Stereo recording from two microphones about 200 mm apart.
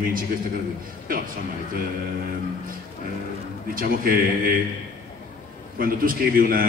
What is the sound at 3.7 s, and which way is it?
Speech, 45° right (ahead or behind).